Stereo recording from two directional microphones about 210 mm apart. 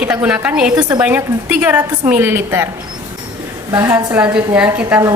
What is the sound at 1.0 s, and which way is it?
A woman's voice, 5° right (ahead or behind).